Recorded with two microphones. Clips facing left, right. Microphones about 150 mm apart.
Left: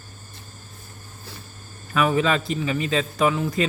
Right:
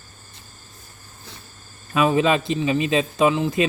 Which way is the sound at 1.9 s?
20° right (ahead or behind).